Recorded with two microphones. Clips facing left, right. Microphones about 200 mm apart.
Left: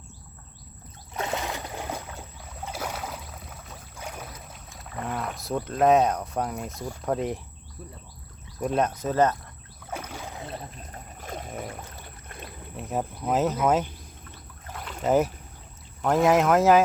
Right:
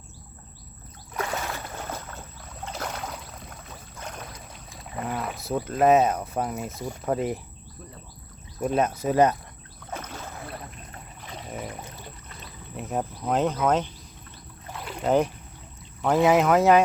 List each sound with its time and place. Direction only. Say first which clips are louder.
1.1 s boat: even; 20° left (ahead or behind); by 7.3 s 5° right (ahead or behind)
8.5 s speech: right 1 dB; centre (ahead or behind)
9.8 s rowboat: left 1 dB; 10° left (ahead or behind)
10.9 s boat: left 7 dB; 45° left (ahead or behind)
12.7 s speech: right 1 dB; centre (ahead or behind)
15.0 s speech: even; 5° left (ahead or behind)